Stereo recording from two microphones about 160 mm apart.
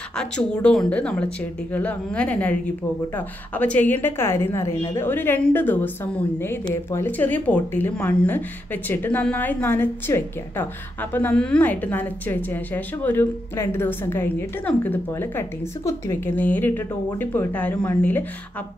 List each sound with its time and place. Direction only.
0.1 s a woman's voice: 5° left (ahead or behind)